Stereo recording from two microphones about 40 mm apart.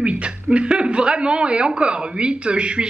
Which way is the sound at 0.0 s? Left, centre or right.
Right.